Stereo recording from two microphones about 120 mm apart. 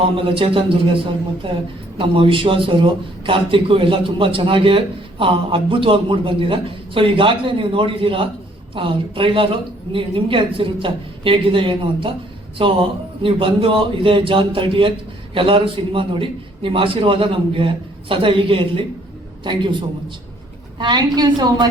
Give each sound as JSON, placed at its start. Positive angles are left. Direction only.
{"t": 0.0, "sound": "a man's voice", "side_deg": -45}